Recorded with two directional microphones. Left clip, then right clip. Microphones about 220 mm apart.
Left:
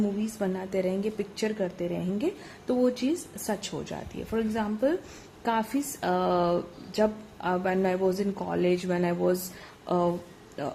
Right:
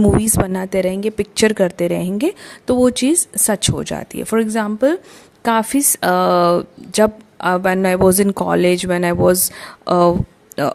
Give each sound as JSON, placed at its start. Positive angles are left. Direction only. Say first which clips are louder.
{"t": 0.2, "sound": "a woman's voice", "louder": "right 12 dB", "side_deg": -45}